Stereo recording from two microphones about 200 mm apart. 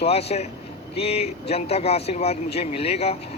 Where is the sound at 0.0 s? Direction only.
30° left (ahead or behind).